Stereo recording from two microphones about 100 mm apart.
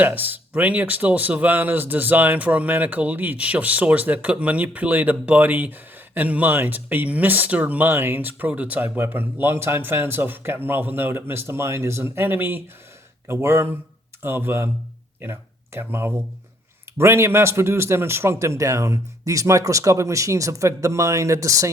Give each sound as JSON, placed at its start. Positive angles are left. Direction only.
{"t": 0.0, "sound": "speech", "side_deg": -20}